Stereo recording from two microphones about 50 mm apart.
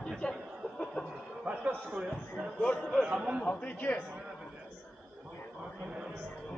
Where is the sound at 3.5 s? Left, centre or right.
Left.